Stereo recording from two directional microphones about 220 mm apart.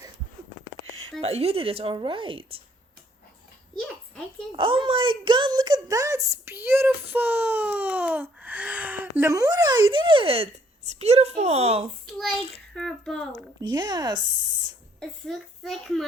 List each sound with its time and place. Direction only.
1.2 s a woman's voice: 30° right (ahead or behind)
3.8 s a sound: centre (ahead or behind)
4.5 s speech: 25° right (ahead or behind)
12.7 s a child's voice: centre (ahead or behind)
13.6 s a woman's voice: 20° right (ahead or behind)
15.0 s a child's voice: centre (ahead or behind)